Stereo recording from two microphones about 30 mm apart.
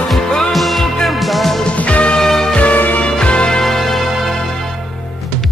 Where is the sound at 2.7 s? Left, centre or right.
Left.